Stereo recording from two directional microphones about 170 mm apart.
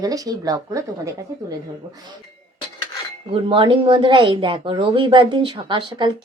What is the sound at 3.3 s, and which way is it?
Speech, 30° right (ahead or behind).